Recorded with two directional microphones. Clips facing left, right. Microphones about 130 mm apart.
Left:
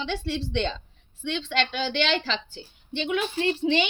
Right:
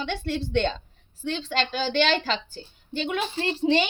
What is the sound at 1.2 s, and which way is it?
A woman's voice, 40° right (ahead or behind).